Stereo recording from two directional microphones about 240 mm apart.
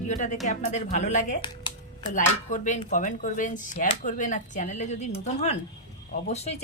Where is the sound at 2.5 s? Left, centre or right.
Left.